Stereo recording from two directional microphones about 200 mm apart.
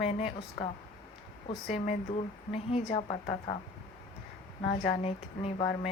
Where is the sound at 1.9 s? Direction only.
30° left (ahead or behind).